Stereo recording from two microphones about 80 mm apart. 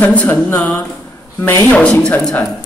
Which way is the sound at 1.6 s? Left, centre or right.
Centre.